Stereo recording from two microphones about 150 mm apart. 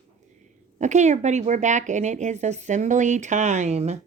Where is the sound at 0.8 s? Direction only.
50° right (ahead or behind).